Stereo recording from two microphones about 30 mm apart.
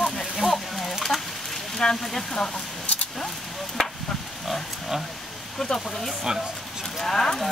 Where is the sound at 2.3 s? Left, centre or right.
Left.